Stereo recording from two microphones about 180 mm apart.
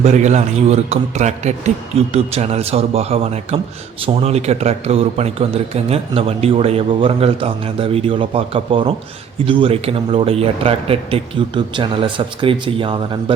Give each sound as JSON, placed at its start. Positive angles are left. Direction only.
{"t": 0.0, "sound": "a man's voice", "side_deg": -40}